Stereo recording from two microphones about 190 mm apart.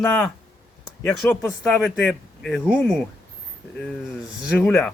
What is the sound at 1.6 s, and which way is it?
Speech, centre (ahead or behind).